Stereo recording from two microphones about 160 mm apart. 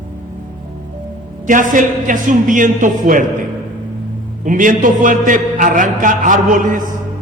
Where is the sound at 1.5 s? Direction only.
55° right (ahead or behind).